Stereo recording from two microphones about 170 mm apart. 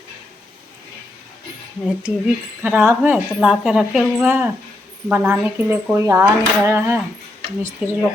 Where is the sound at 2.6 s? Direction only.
10° right (ahead or behind).